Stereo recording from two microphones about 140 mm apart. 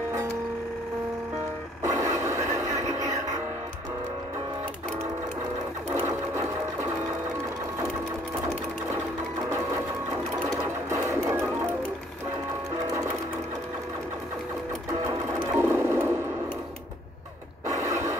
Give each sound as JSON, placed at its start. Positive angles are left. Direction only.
{"t": 1.8, "sound": "radio", "side_deg": -20}
{"t": 3.0, "sound": "music", "side_deg": -25}
{"t": 5.9, "sound": "sewing machine", "side_deg": -20}
{"t": 10.5, "sound": "sewing machine", "side_deg": -20}
{"t": 15.0, "sound": "sewing machine", "side_deg": -20}
{"t": 17.6, "sound": "mechanisms", "side_deg": -20}